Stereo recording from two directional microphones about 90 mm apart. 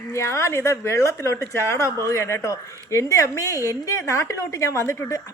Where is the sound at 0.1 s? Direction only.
35° left (ahead or behind).